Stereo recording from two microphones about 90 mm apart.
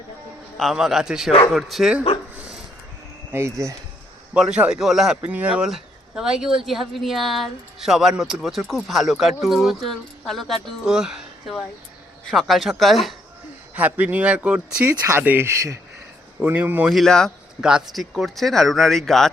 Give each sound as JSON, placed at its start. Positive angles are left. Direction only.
{"t": 0.5, "sound": "speech", "side_deg": 0}
{"t": 3.3, "sound": "speech", "side_deg": -35}
{"t": 4.4, "sound": "speech", "side_deg": -10}
{"t": 5.2, "sound": "speech", "side_deg": -15}
{"t": 13.7, "sound": "speech", "side_deg": -20}
{"t": 15.4, "sound": "speech", "side_deg": -35}
{"t": 16.4, "sound": "speech", "side_deg": -20}
{"t": 16.9, "sound": "speech", "side_deg": 5}
{"t": 17.6, "sound": "speech", "side_deg": -10}